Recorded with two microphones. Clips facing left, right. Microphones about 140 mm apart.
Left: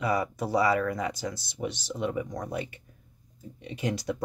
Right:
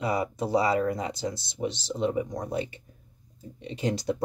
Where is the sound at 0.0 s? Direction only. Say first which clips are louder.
Even; 25° right (ahead or behind).